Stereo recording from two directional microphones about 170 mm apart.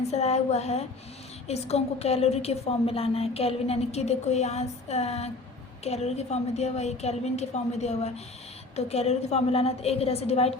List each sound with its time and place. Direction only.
0.1 s a woman's voice: 40° left (ahead or behind)